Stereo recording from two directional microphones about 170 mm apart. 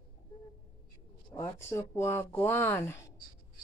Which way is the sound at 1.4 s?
15° left (ahead or behind).